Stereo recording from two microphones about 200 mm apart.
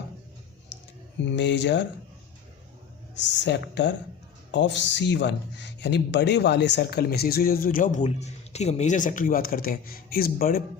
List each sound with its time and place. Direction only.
1.2 s speech: 60° left (ahead or behind)
3.2 s speech: 60° left (ahead or behind); by 10.6 s 45° left (ahead or behind)